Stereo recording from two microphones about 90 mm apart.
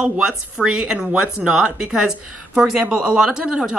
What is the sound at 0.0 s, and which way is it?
Speech, 10° right (ahead or behind).